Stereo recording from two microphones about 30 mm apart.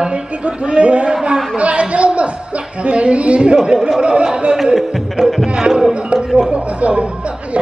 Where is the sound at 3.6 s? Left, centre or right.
Centre.